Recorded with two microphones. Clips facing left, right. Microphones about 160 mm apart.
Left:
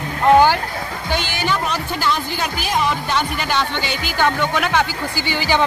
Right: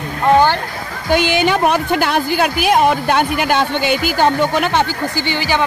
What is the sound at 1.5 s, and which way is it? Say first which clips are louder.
Speech: right 7 dB; 60° right (ahead or behind).